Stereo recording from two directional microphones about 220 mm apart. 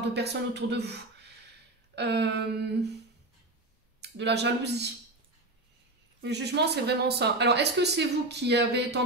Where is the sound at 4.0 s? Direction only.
50° right (ahead or behind).